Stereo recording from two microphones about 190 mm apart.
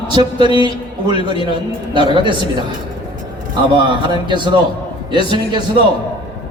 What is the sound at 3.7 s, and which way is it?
Speech, 25° right (ahead or behind).